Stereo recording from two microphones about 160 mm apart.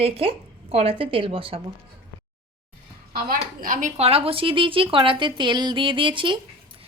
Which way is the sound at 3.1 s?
65° right (ahead or behind).